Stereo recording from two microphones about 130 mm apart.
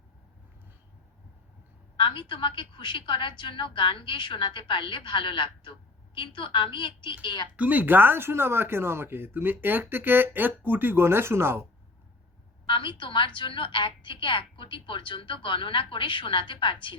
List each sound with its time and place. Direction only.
2.0 s a woman's voice: 40° left (ahead or behind)
7.5 s speech: 10° right (ahead or behind)
12.6 s a woman's voice: 40° left (ahead or behind)